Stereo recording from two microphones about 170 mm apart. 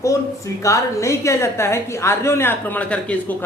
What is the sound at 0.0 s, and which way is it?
A woman's voice, 20° left (ahead or behind).